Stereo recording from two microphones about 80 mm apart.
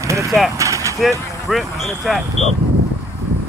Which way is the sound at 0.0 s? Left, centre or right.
Right.